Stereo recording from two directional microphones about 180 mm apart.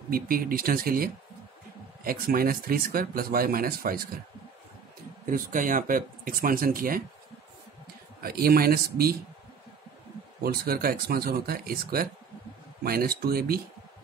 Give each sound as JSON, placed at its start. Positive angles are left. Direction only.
{"t": 0.1, "sound": "speech", "side_deg": -55}
{"t": 5.2, "sound": "speech", "side_deg": -50}
{"t": 8.2, "sound": "speech", "side_deg": -55}
{"t": 10.4, "sound": "speech", "side_deg": -55}